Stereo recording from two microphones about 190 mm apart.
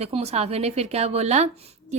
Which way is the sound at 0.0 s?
35° right (ahead or behind).